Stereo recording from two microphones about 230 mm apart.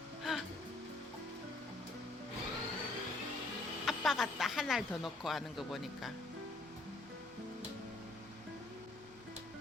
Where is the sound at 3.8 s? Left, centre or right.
Centre.